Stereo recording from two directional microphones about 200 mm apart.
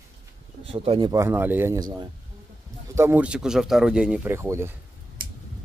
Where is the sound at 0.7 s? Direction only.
25° right (ahead or behind).